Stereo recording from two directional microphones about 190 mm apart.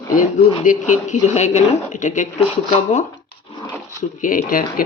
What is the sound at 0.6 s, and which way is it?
Speech, 40° left (ahead or behind).